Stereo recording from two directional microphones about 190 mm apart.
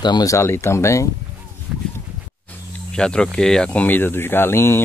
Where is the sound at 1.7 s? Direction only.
5° right (ahead or behind).